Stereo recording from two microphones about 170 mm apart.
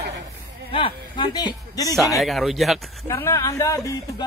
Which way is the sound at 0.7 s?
30° left (ahead or behind).